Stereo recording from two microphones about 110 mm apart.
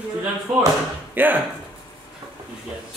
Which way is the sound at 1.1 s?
15° right (ahead or behind).